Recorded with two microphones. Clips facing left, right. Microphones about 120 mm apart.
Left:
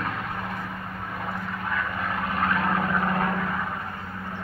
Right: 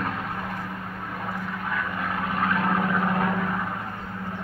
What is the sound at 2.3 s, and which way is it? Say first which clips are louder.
Vehicle: right 1 dB; centre (ahead or behind).